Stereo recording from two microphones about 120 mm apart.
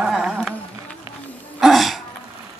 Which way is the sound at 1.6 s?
Centre (ahead or behind).